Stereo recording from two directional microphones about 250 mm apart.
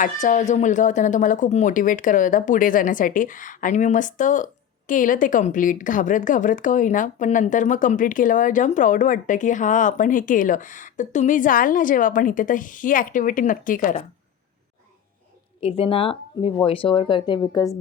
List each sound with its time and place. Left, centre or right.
0.0 s a woman's voice: left
15.6 s speech: left